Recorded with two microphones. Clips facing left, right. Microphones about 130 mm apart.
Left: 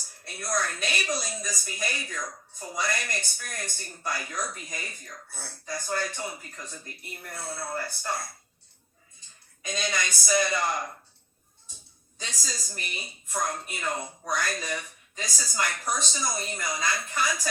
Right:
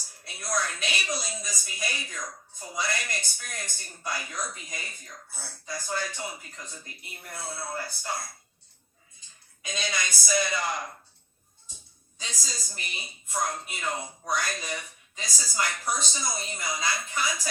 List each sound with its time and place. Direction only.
0.3 s speech: 50° left (ahead or behind)
9.6 s speech: 45° left (ahead or behind)
12.2 s speech: 50° left (ahead or behind)